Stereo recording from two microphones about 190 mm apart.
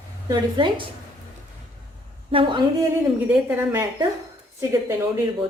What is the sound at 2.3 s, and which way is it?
Speech, 25° right (ahead or behind).